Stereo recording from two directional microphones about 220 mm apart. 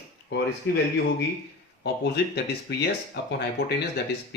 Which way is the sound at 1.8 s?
50° left (ahead or behind).